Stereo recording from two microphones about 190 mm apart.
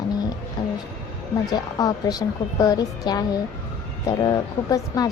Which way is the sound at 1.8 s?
20° left (ahead or behind).